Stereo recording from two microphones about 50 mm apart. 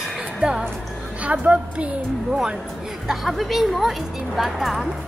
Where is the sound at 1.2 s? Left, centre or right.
Right.